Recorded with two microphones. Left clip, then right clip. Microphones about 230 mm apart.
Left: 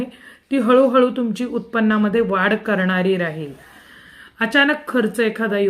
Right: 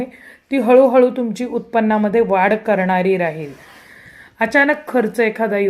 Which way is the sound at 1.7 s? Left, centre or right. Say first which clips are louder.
Right 3 dB; right.